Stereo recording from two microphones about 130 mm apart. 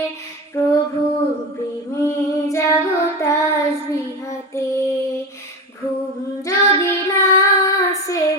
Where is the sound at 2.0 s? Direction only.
20° left (ahead or behind).